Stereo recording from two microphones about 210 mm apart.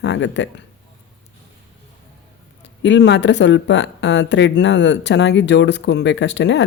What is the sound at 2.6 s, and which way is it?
Speech, 60° left (ahead or behind).